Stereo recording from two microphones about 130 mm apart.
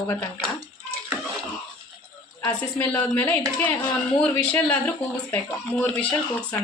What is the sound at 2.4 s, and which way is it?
A woman's voice, 25° left (ahead or behind).